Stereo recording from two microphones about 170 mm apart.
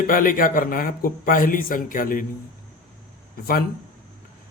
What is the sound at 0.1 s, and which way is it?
Speech, 55° left (ahead or behind).